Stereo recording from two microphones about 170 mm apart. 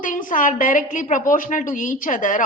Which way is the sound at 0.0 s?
50° left (ahead or behind).